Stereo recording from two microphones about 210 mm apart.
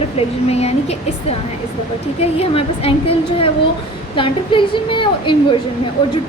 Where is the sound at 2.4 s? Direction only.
25° left (ahead or behind).